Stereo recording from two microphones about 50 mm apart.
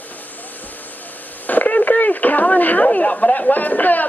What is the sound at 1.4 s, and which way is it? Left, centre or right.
Radio, left.